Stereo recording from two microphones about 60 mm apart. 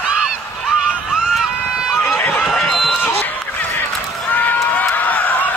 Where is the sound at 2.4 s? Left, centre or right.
Centre.